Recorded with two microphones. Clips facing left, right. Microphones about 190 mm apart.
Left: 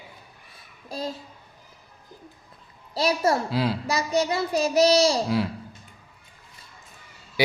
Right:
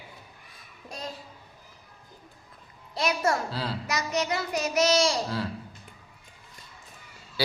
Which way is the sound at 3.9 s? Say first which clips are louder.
Left 1 dB; 30° left (ahead or behind).